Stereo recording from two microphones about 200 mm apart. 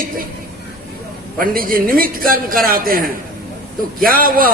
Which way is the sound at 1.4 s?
45° right (ahead or behind).